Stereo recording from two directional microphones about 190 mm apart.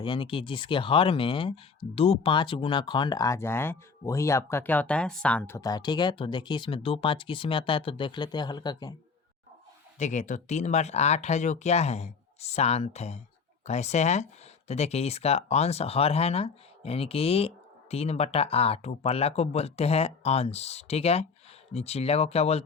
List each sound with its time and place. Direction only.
0.0 s speech: 25° left (ahead or behind)
10.0 s speech: 40° left (ahead or behind)